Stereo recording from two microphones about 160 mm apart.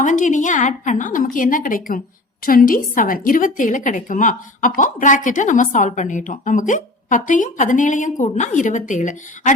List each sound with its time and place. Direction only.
0.0 s a woman's voice: 55° left (ahead or behind)